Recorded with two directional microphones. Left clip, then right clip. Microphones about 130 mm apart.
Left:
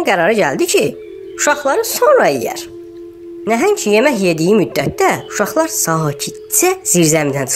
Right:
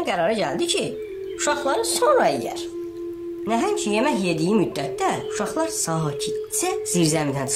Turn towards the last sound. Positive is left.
turn(degrees=45)  # may be behind; listen again after turning